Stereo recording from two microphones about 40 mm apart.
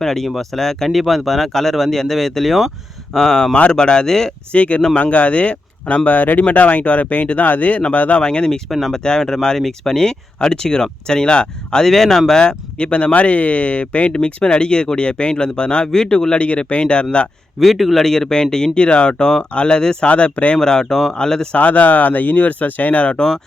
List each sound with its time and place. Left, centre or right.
0.0 s speech: centre
4.5 s speech: left
6.1 s speech: left
8.2 s speech: left
8.7 s speech: centre
9.9 s speech: centre
12.8 s speech: left
14.1 s speech: left
17.6 s speech: centre
18.0 s speech: centre
20.1 s speech: left
20.6 s speech: centre
21.5 s speech: left